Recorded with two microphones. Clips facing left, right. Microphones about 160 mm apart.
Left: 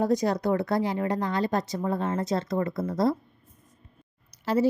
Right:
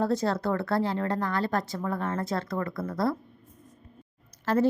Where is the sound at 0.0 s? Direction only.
15° left (ahead or behind).